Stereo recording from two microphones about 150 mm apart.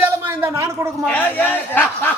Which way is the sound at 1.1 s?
10° left (ahead or behind).